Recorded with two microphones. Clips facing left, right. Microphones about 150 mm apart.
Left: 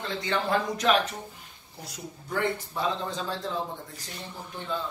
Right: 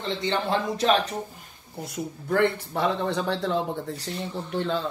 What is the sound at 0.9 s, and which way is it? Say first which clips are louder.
Speech: right 2 dB; 35° right (ahead or behind).